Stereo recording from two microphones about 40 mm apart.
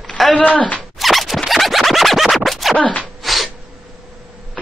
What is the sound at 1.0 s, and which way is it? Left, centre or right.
Scratch, centre.